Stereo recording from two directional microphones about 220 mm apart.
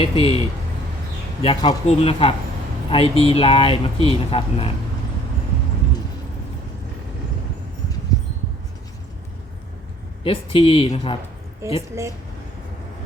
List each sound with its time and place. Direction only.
0.0 s speech: 25° left (ahead or behind)
10.2 s speech: 25° left (ahead or behind)